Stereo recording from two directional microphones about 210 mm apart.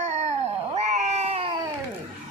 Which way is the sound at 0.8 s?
30° right (ahead or behind).